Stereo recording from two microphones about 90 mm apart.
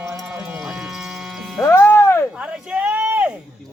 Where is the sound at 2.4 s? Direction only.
15° right (ahead or behind).